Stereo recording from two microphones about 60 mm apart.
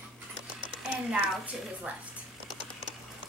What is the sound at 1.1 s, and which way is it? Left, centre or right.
Speech, right.